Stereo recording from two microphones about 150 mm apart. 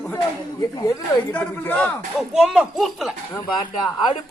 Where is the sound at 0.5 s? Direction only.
20° left (ahead or behind).